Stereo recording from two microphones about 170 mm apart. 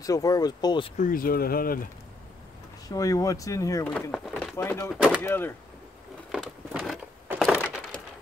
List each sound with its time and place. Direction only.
0.0 s speech: 20° left (ahead or behind)
0.9 s speech: 55° left (ahead or behind)
2.9 s speech: 20° left (ahead or behind)
3.8 s speech: 5° left (ahead or behind)
4.9 s speech: 5° right (ahead or behind)
5.2 s speech: 10° left (ahead or behind)
6.3 s a sound: centre (ahead or behind)